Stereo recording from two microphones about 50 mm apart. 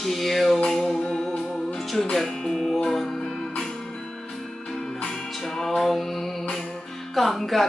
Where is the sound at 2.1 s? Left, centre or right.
Centre.